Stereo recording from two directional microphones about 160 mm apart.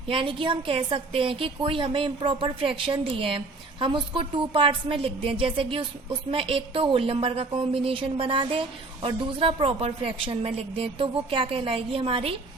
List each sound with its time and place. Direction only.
0.1 s a woman's voice: 35° right (ahead or behind)